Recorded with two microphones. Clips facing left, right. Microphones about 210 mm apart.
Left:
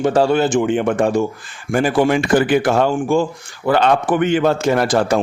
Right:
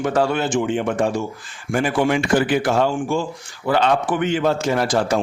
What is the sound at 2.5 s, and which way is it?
A man's voice, 55° left (ahead or behind).